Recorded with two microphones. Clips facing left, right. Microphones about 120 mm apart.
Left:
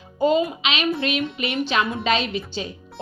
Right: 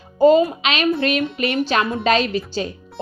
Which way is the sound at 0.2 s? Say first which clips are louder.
Right 6 dB; 45° right (ahead or behind).